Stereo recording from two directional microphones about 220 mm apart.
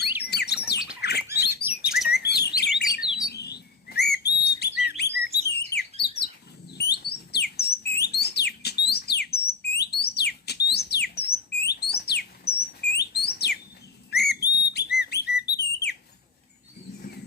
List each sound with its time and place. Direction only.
0.2 s bird: 45° left (ahead or behind)
1.5 s chirp: 10° right (ahead or behind)
2.1 s bird: 50° left (ahead or behind)
6.7 s a sound: 50° left (ahead or behind)
14.1 s whistle: 50° left (ahead or behind)